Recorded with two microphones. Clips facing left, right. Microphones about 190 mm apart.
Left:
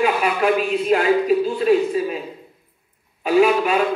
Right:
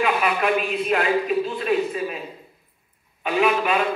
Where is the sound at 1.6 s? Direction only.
30° left (ahead or behind).